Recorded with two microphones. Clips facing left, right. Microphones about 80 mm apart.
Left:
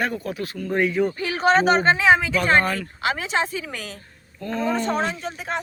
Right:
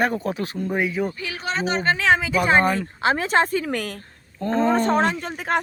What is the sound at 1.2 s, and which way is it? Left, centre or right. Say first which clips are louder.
Speech: left 8 dB; left.